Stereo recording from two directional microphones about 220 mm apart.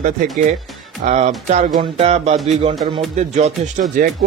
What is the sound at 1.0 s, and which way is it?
Speech, 30° right (ahead or behind).